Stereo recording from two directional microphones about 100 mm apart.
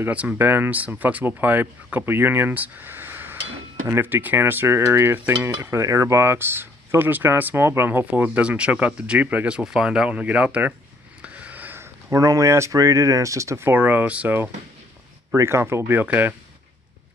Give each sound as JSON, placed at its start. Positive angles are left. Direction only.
{"t": 0.0, "sound": "cutlery", "side_deg": -15}
{"t": 9.6, "sound": "speech", "side_deg": -5}
{"t": 15.3, "sound": "cutlery", "side_deg": -25}